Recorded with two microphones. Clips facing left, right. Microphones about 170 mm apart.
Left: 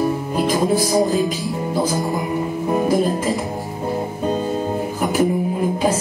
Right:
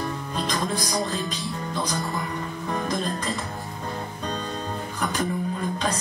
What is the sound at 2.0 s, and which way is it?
Music, 20° left (ahead or behind).